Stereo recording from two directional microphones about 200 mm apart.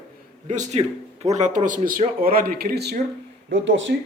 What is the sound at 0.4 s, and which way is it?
Speech, 35° right (ahead or behind).